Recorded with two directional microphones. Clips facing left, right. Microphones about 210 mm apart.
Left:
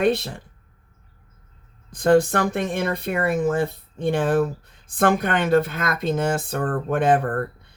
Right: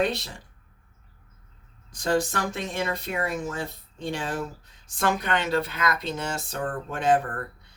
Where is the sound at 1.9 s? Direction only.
55° left (ahead or behind).